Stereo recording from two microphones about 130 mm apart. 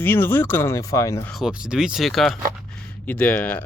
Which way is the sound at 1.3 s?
5° right (ahead or behind).